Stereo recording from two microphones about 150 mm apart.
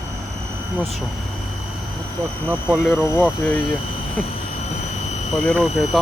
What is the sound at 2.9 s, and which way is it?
Speech, 10° left (ahead or behind).